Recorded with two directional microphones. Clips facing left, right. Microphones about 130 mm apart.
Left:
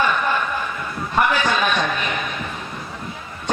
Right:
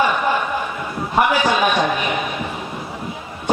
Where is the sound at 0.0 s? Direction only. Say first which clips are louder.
Right 2 dB; 15° right (ahead or behind).